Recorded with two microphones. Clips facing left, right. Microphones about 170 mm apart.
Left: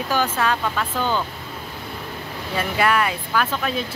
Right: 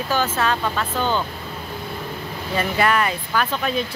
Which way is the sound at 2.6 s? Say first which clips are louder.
Even; 5° left (ahead or behind).